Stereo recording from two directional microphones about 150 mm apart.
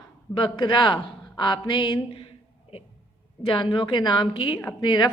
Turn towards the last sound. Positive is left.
turn(degrees=30)  # may be behind; listen again after turning